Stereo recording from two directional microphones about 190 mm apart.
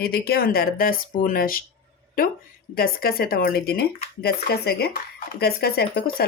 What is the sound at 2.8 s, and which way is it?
Speech, 50° left (ahead or behind).